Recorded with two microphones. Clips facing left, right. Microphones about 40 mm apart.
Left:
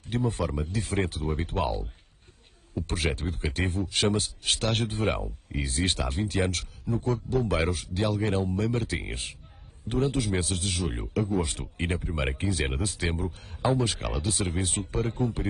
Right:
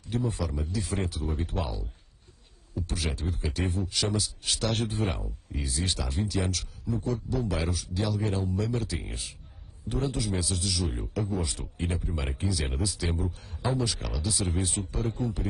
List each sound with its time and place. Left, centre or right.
0.0 s speech: left